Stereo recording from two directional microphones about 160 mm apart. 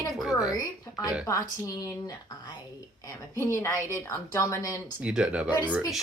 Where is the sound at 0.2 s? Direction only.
5° right (ahead or behind).